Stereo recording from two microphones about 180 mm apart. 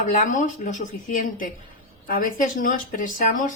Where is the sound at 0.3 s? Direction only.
45° left (ahead or behind).